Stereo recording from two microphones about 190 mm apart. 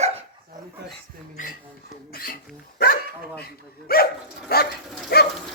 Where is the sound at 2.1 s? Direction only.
50° left (ahead or behind).